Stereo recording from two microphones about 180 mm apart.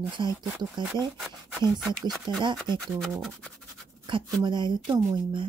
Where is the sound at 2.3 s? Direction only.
25° right (ahead or behind).